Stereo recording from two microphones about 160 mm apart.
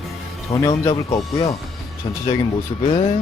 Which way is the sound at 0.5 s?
20° left (ahead or behind).